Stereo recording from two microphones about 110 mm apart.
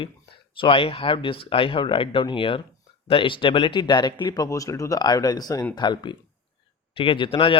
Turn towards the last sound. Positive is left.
turn(degrees=50)  # may be behind; listen again after turning